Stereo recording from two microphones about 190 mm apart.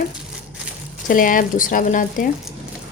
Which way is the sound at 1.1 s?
45° left (ahead or behind).